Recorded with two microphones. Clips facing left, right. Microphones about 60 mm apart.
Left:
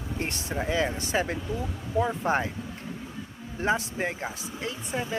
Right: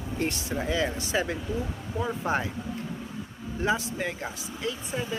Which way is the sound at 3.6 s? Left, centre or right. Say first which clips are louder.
Left 1 dB; left.